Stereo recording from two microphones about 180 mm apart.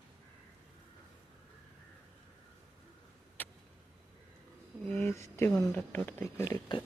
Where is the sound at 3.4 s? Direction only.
10° left (ahead or behind).